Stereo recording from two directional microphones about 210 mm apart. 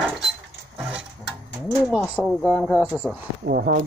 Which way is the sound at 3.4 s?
45° right (ahead or behind).